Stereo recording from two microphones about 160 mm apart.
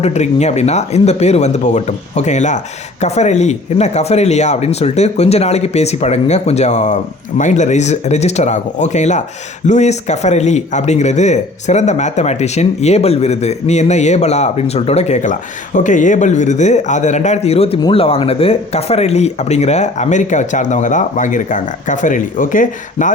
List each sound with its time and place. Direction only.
0.0 s speech: 45° left (ahead or behind)